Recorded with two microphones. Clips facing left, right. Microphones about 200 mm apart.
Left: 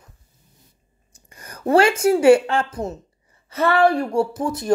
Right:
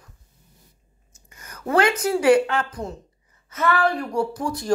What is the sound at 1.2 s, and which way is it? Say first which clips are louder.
A woman's voice: left 6 dB; 30° left (ahead or behind).